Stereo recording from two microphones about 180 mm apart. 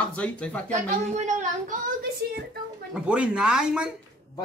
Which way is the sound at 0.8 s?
40° right (ahead or behind).